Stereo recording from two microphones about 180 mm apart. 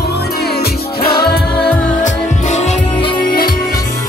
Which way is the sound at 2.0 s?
40° left (ahead or behind).